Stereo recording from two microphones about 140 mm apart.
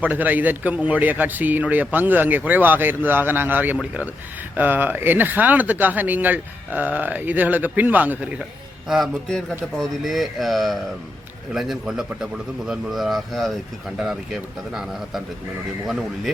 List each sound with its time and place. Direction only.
0.0 s a man's voice: 10° right (ahead or behind)
8.9 s speech: centre (ahead or behind)